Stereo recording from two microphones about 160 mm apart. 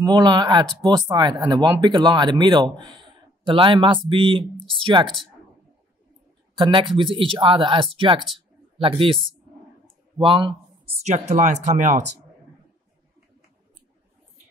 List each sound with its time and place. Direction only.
0.0 s speech: 25° right (ahead or behind)
6.6 s speech: 30° right (ahead or behind)
11.1 s speech: 45° right (ahead or behind)